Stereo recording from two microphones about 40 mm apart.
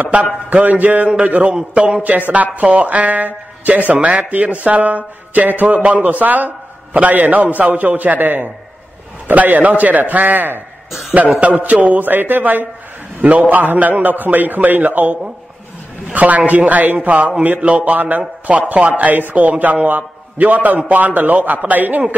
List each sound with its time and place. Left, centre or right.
0.0 s a man's voice: right
1.7 s a man's voice: right
2.0 s speech: right
5.8 s a man's voice: right
6.0 s a man's voice: right
9.3 s a man's voice: right
13.2 s a man's voice: right
18.9 s a man's voice: right